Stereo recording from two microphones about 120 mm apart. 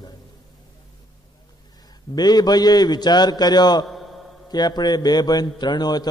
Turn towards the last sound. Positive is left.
turn(degrees=35)  # may be behind; listen again after turning